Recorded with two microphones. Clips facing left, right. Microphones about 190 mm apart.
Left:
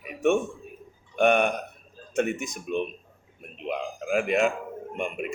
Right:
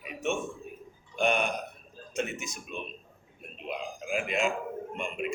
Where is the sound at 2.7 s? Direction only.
55° left (ahead or behind).